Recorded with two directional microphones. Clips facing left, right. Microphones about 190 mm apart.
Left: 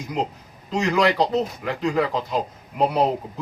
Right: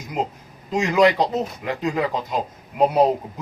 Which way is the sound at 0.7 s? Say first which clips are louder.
Right 3 dB; 20° right (ahead or behind).